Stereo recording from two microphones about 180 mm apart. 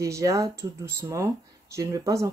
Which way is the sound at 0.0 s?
15° right (ahead or behind).